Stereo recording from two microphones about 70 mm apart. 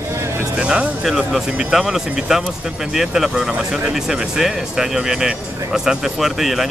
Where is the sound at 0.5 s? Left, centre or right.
Centre.